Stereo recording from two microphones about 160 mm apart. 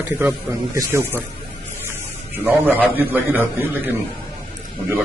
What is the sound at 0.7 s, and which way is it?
Speech, 15° right (ahead or behind).